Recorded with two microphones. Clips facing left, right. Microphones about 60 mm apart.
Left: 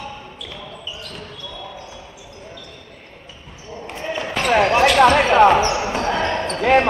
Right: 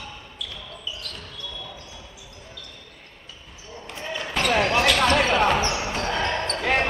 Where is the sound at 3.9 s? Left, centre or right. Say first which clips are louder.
Left 6 dB; left.